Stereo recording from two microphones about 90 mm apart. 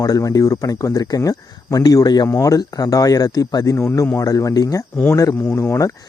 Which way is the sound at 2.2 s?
35° left (ahead or behind).